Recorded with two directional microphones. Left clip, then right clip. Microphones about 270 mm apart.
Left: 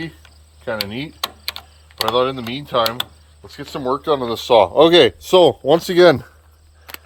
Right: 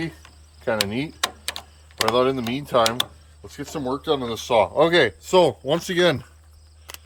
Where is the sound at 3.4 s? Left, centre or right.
Centre.